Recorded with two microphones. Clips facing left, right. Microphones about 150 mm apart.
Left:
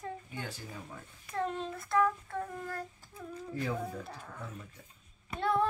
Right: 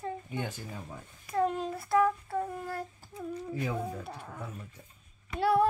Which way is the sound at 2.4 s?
15° right (ahead or behind).